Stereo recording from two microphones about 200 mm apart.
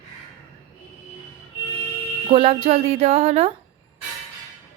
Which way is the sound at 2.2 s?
25° right (ahead or behind).